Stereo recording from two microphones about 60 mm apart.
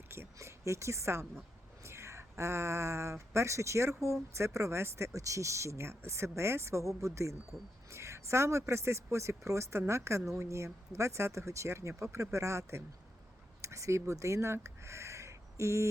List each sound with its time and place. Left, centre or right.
0.1 s a woman's voice: right